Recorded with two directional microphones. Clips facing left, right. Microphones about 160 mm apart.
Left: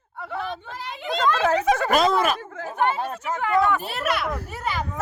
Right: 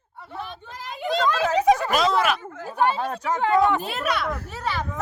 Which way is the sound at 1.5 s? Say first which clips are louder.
Right 2 dB; 50° left (ahead or behind).